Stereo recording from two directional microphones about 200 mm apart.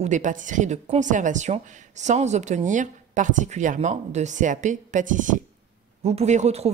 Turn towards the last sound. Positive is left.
turn(degrees=-35)  # may be behind; listen again after turning